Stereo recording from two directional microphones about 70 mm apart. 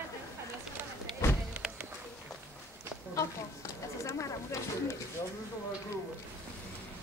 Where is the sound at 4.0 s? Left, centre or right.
Left.